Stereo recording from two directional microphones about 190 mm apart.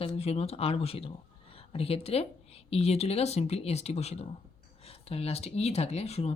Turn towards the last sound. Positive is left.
turn(degrees=35)  # may be behind; listen again after turning